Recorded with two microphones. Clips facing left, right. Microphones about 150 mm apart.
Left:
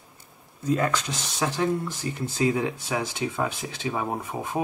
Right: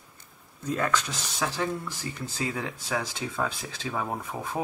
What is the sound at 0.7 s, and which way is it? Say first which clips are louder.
Speech: left 2 dB; 25° left (ahead or behind).